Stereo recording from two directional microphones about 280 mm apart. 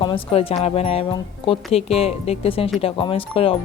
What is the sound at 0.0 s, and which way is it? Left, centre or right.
Speech, centre.